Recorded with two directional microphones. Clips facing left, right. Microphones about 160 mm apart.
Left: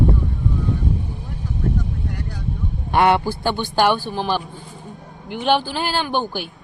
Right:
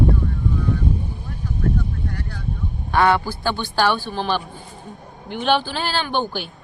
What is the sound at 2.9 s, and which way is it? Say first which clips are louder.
A man's voice: left 1 dB; 20° left (ahead or behind).